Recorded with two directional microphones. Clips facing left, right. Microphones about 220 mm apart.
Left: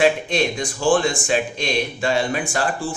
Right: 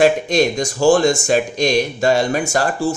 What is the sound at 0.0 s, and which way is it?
Speech, 40° right (ahead or behind).